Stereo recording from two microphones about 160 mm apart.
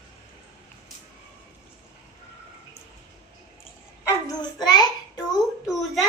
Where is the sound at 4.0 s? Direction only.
25° left (ahead or behind).